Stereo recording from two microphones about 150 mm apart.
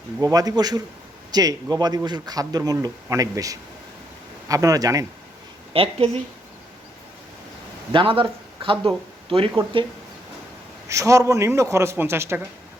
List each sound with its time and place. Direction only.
0.2 s speech: 25° right (ahead or behind)
5.7 s speech: 40° right (ahead or behind)
7.9 s speech: 35° right (ahead or behind)
10.8 s speech: 20° right (ahead or behind)